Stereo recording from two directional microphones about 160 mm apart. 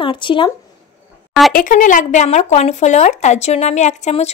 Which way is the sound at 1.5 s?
60° left (ahead or behind).